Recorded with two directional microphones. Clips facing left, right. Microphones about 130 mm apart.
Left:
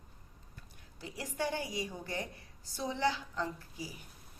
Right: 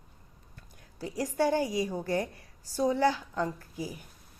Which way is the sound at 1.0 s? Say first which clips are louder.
Right 9 dB; 40° right (ahead or behind).